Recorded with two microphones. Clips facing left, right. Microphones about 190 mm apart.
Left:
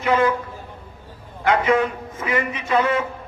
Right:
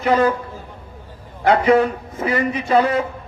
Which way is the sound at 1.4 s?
35° right (ahead or behind).